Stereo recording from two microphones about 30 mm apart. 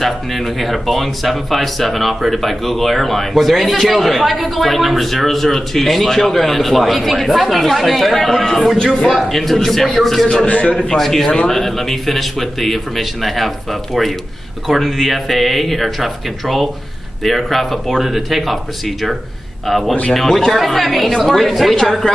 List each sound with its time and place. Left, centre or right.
0.0 s speech: centre
8.7 s a man's voice: left
9.0 s a man's voice: centre
10.2 s a man's voice: left
11.0 s a man's voice: centre
14.7 s speech: centre
17.9 s speech: centre
19.7 s a man's voice: centre
22.0 s music: left